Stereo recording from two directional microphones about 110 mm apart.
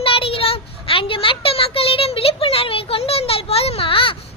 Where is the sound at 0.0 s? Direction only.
55° left (ahead or behind).